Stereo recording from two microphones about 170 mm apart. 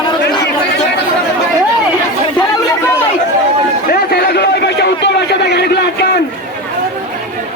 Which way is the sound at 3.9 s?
70° left (ahead or behind).